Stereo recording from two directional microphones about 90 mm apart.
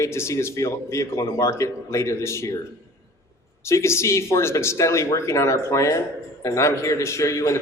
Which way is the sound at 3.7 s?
30° left (ahead or behind).